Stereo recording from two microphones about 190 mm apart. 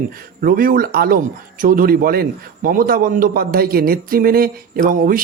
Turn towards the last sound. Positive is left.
turn(degrees=-45)  # may be behind; listen again after turning